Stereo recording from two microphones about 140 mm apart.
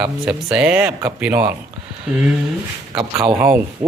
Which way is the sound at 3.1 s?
10° right (ahead or behind).